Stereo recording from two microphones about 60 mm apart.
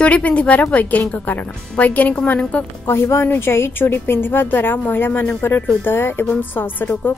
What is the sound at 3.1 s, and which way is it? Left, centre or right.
A woman's voice, left.